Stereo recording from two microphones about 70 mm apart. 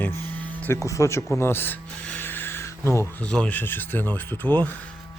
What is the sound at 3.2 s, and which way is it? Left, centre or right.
Speech, centre.